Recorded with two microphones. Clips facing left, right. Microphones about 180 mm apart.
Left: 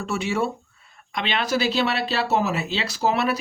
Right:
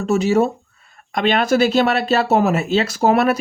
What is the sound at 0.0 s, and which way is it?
Speech, 40° right (ahead or behind).